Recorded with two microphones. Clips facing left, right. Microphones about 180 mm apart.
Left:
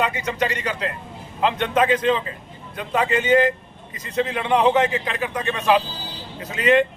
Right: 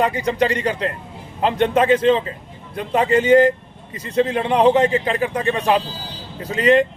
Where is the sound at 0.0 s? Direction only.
35° right (ahead or behind).